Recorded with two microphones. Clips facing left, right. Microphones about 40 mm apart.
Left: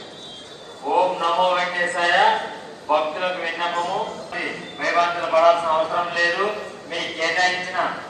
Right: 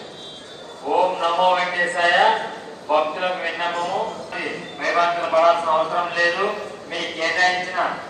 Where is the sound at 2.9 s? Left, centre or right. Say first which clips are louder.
Right 1 dB; centre.